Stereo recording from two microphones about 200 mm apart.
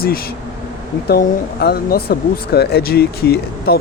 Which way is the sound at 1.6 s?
50° left (ahead or behind).